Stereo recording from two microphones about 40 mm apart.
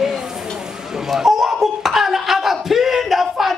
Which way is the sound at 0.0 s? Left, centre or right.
Centre.